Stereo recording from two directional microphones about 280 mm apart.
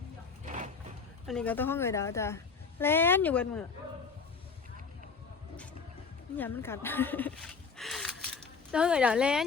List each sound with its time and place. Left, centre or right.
0.4 s vehicle: right
1.3 s a woman's voice: centre
6.3 s speech: centre